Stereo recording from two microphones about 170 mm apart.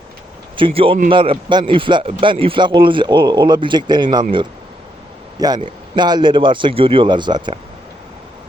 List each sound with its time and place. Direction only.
0.5 s a man's voice: 30° right (ahead or behind)